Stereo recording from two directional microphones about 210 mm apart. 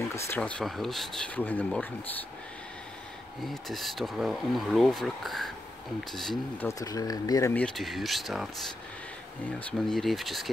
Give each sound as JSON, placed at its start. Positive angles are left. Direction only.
{"t": 0.1, "sound": "speech", "side_deg": 10}
{"t": 3.4, "sound": "speech", "side_deg": 0}
{"t": 6.7, "sound": "speech", "side_deg": 15}
{"t": 9.6, "sound": "speech", "side_deg": 5}